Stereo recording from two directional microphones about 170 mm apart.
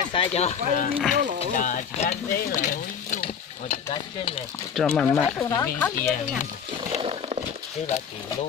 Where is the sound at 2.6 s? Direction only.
50° left (ahead or behind).